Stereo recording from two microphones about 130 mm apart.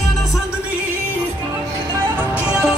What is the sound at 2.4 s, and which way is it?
Music, 10° right (ahead or behind).